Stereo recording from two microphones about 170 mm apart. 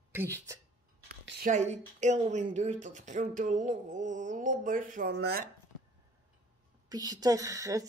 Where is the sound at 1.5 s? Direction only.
45° right (ahead or behind).